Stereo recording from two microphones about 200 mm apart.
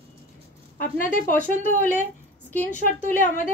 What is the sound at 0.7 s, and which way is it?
Speech, 40° left (ahead or behind).